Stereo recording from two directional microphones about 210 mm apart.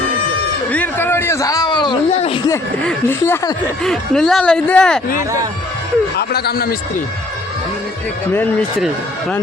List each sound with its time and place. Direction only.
0.7 s a man's voice: 10° left (ahead or behind); by 2.4 s 25° left (ahead or behind)
2.5 s speech: 10° left (ahead or behind)
6.1 s speech: 50° left (ahead or behind)